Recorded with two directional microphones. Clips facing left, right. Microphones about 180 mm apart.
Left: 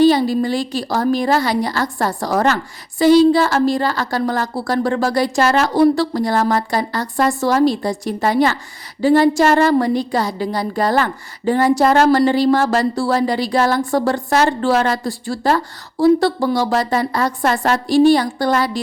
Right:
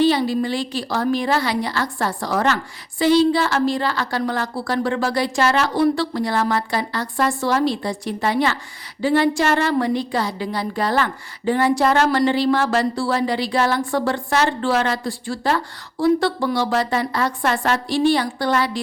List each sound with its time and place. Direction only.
0.0 s a woman's voice: 40° left (ahead or behind)